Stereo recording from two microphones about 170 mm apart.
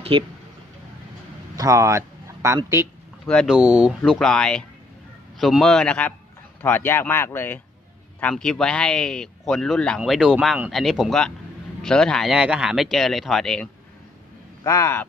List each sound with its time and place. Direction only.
1.6 s a man's voice: 20° right (ahead or behind)
3.3 s speech: centre (ahead or behind)
4.0 s speech: 5° left (ahead or behind)
14.6 s speech: 15° left (ahead or behind)